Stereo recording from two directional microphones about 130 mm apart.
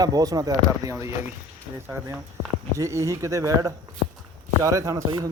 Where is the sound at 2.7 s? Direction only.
25° right (ahead or behind).